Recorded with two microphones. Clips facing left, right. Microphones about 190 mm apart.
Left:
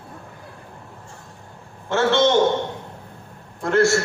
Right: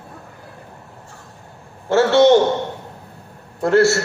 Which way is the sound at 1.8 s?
40° right (ahead or behind).